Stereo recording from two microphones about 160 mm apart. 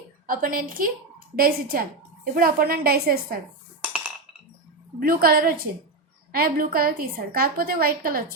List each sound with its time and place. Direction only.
0.3 s a woman's voice: 65° right (ahead or behind)
4.9 s a woman's voice: 65° right (ahead or behind)